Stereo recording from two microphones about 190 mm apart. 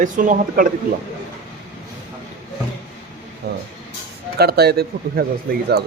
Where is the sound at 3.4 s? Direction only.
55° right (ahead or behind).